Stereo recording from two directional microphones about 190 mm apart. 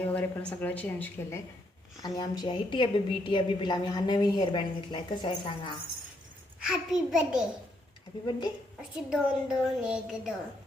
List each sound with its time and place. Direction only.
0.0 s a woman's voice: 10° left (ahead or behind); by 5.7 s 25° left (ahead or behind)
6.6 s a woman's voice: 5° right (ahead or behind)
9.0 s a woman's voice: 5° right (ahead or behind)